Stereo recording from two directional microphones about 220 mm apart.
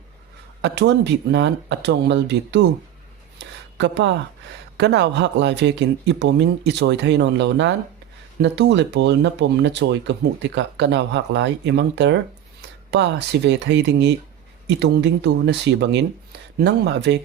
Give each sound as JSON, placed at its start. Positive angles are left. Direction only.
{"t": 0.6, "sound": "speech", "side_deg": -50}
{"t": 3.3, "sound": "a sound", "side_deg": -55}
{"t": 4.8, "sound": "speech", "side_deg": -50}